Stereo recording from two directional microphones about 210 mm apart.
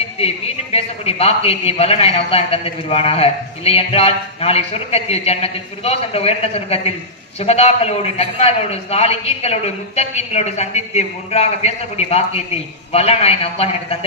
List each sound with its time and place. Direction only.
0.2 s a man's voice: 30° left (ahead or behind)